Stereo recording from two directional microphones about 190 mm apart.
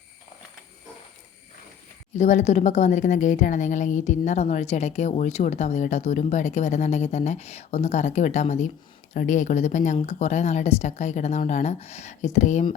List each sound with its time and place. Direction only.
2.1 s a woman's voice: 40° left (ahead or behind)